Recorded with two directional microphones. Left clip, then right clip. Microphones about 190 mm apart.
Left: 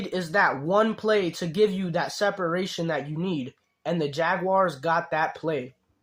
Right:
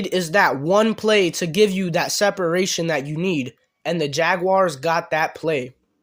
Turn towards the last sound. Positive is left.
turn(degrees=-35)  # may be behind; listen again after turning